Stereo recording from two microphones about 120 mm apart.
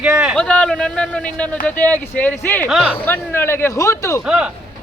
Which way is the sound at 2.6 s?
5° right (ahead or behind).